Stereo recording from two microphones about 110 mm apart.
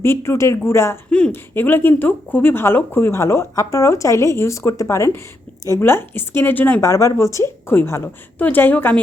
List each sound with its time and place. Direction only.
0.3 s speech: 25° left (ahead or behind)
6.8 s speech: 30° left (ahead or behind)